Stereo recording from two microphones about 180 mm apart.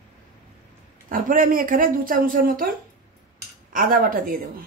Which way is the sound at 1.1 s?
50° right (ahead or behind).